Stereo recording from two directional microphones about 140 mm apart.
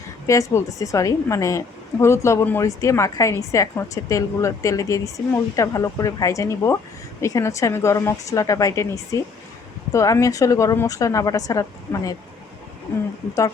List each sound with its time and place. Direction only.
0.3 s a woman's voice: 25° left (ahead or behind)